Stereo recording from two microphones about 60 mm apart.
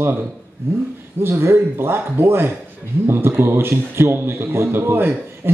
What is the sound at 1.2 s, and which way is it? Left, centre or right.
A man's voice, right.